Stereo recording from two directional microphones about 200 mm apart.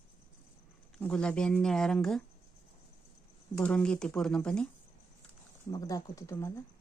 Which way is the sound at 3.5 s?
5° left (ahead or behind).